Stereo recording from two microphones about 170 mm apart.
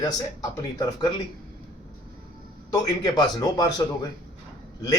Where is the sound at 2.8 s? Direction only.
25° left (ahead or behind).